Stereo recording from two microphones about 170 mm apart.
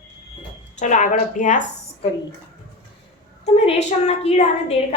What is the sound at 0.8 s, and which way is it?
A woman's voice, 45° left (ahead or behind).